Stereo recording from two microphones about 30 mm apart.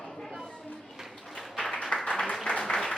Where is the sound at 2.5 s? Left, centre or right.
Left.